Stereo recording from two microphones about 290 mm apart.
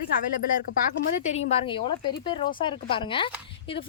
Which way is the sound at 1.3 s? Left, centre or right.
Left.